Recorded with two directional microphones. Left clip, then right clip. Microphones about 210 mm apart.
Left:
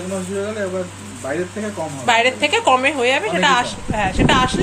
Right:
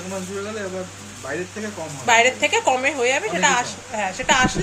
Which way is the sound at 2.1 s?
10° right (ahead or behind).